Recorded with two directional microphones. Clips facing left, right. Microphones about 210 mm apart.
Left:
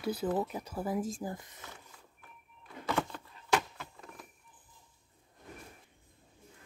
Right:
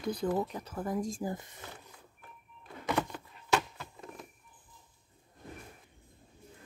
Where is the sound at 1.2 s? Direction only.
25° right (ahead or behind).